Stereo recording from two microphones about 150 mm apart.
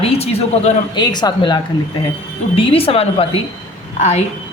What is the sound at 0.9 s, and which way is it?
A woman's voice, 30° left (ahead or behind).